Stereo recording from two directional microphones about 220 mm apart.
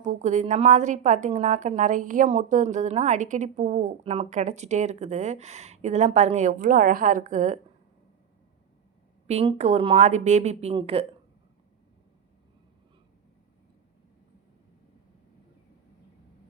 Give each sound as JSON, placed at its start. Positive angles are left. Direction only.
{"t": 0.0, "sound": "a woman's voice", "side_deg": -35}
{"t": 9.2, "sound": "a woman's voice", "side_deg": -30}